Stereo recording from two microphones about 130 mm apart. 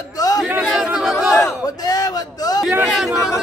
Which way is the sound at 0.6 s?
5° right (ahead or behind).